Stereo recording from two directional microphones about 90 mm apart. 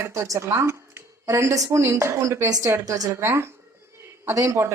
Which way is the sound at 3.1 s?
30° right (ahead or behind).